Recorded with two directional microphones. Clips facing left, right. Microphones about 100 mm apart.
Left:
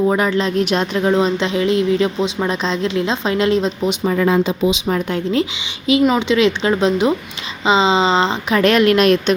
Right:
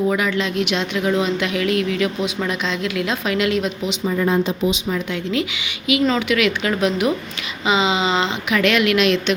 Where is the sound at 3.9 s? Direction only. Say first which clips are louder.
Left 3 dB; 80° left.